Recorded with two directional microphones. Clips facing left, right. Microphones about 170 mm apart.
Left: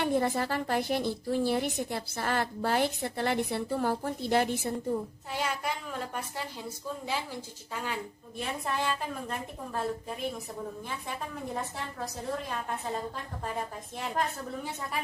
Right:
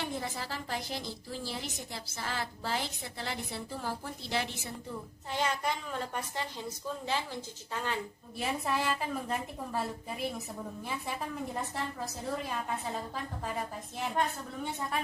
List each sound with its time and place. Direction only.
0.0 s a woman's voice: 55° left (ahead or behind)
5.3 s a woman's voice: 5° left (ahead or behind)
7.7 s speech: 10° left (ahead or behind)
8.4 s a woman's voice: 5° right (ahead or behind)
14.0 s a woman's voice: 5° left (ahead or behind)